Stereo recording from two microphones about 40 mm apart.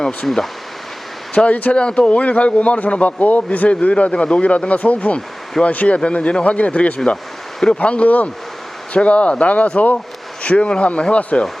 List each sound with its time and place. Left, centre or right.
0.0 s speech: centre
2.1 s a man's voice: left
6.0 s a man's voice: left